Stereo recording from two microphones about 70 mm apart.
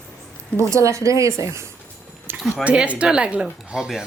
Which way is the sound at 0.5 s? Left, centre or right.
Right.